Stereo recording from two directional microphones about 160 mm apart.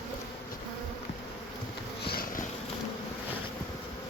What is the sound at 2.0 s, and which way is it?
Sniff, 70° left (ahead or behind).